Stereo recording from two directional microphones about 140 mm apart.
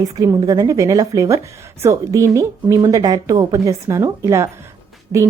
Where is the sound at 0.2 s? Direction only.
25° right (ahead or behind).